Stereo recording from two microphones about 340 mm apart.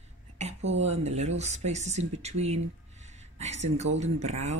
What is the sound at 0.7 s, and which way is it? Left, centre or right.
Speech, centre.